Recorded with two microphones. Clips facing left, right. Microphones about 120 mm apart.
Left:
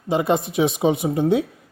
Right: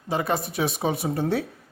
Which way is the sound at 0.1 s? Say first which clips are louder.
Left 6 dB; 20° left (ahead or behind).